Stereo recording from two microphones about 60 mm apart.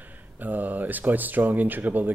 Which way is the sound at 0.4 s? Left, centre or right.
Right.